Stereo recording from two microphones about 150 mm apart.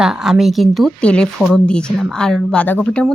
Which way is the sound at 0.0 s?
5° right (ahead or behind).